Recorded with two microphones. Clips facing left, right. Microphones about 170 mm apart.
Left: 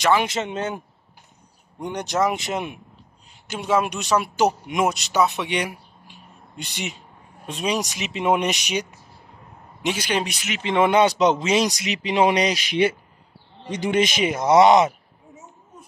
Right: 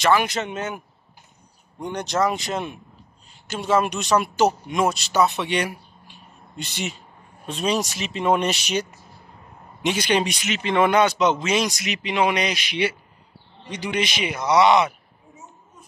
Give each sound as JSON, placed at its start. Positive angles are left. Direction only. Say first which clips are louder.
{"t": 0.0, "sound": "speech", "louder": "even", "side_deg": 20}
{"t": 1.8, "sound": "speech", "louder": "even", "side_deg": 15}
{"t": 10.6, "sound": "speech", "louder": "left 1 dB", "side_deg": 20}